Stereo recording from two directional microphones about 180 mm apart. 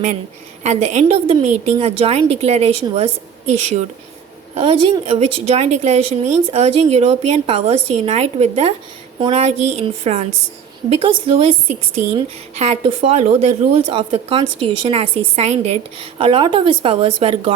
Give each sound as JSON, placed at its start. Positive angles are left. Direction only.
{"t": 0.6, "sound": "a woman's voice", "side_deg": -40}